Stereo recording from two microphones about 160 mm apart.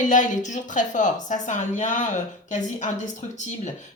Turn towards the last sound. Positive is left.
turn(degrees=50)  # may be behind; listen again after turning